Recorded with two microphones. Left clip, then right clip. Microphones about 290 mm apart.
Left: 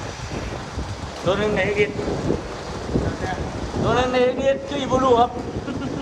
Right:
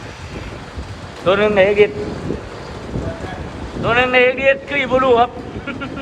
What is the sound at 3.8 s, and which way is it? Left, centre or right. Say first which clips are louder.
Speech: right 6 dB; centre.